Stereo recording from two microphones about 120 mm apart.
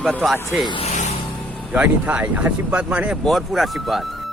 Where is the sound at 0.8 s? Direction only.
80° left.